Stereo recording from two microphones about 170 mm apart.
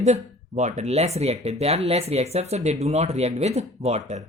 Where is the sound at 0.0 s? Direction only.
40° right (ahead or behind).